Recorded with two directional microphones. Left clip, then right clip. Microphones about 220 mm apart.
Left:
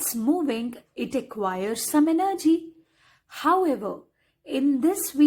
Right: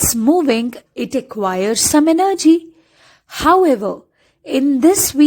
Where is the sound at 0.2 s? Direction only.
35° right (ahead or behind).